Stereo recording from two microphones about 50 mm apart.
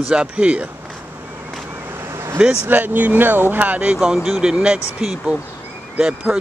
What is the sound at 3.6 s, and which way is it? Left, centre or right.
Speech, right.